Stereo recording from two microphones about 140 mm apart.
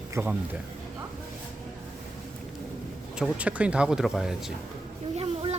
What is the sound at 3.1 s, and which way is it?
Speech, 5° right (ahead or behind).